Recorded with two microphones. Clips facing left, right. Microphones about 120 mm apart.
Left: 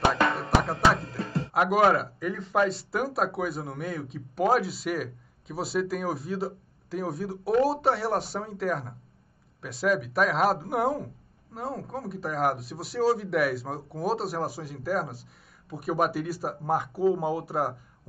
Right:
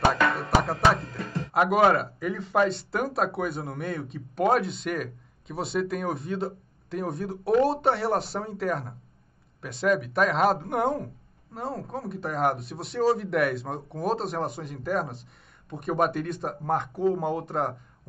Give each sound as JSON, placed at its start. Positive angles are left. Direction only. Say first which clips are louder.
{"t": 0.4, "sound": "music", "louder": "right 1 dB", "side_deg": 0}
{"t": 1.1, "sound": "music", "louder": "left 2 dB", "side_deg": 30}
{"t": 1.5, "sound": "speech", "louder": "right 1 dB", "side_deg": 0}